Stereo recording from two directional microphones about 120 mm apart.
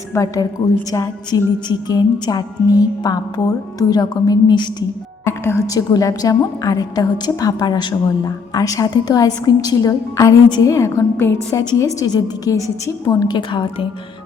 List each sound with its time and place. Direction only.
0.1 s a woman's voice: 25° left (ahead or behind)
1.6 s music: 35° left (ahead or behind)
5.2 s a woman's voice: 20° left (ahead or behind)
11.9 s music: 30° left (ahead or behind)